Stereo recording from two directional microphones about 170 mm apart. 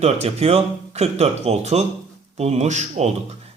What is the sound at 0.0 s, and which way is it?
A man's voice, 40° right (ahead or behind).